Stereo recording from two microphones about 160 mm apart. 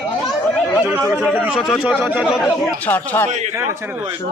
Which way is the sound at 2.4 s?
5° left (ahead or behind).